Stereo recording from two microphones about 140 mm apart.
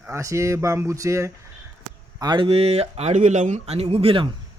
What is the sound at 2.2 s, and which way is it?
Speech, 35° right (ahead or behind).